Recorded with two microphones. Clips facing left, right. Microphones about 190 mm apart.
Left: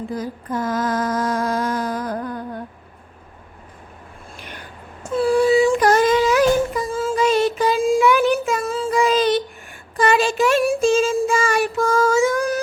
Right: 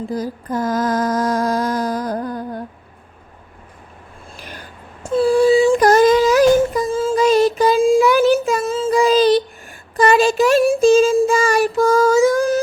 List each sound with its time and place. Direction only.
0.1 s mantra: 40° right (ahead or behind)
4.4 s a sound: 35° right (ahead or behind)
6.9 s child singing: 25° right (ahead or behind)
8.6 s child singing: 25° right (ahead or behind)
10.0 s a sound: 40° right (ahead or behind)
10.7 s child singing: 35° right (ahead or behind)